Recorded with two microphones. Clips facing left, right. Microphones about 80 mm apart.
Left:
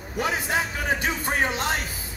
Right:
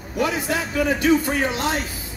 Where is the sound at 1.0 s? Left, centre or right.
Left.